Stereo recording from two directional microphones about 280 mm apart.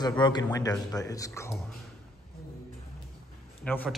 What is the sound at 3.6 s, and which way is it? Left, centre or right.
Speech, centre.